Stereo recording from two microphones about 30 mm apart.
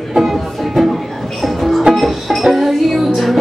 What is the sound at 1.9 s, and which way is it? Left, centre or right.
Music, right.